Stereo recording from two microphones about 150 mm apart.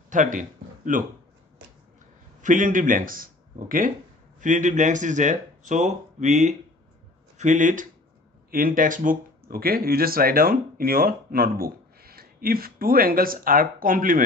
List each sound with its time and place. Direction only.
0.1 s a sound: 60° right (ahead or behind)
2.4 s speech: 60° right (ahead or behind)
8.5 s speech: 70° right (ahead or behind)